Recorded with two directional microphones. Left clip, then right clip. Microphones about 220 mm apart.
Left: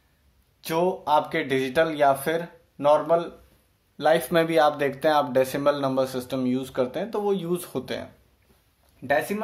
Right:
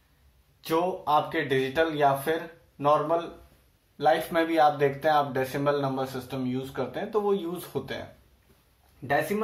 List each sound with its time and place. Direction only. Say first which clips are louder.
0.6 s speech: left 2 dB; 50° left (ahead or behind)